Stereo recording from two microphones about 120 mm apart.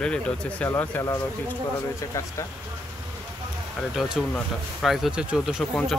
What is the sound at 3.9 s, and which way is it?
Speech, 5° right (ahead or behind).